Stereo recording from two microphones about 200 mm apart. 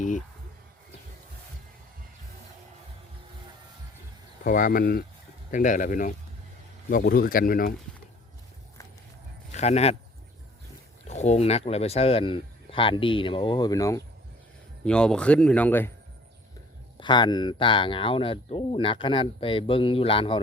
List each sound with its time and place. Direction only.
4.4 s speech: 45° left (ahead or behind)
9.5 s speech: 35° left (ahead or behind)
11.1 s speech: 35° left (ahead or behind); by 14.0 s 15° left (ahead or behind)
14.8 s speech: 5° left (ahead or behind)
17.0 s speech: 20° left (ahead or behind)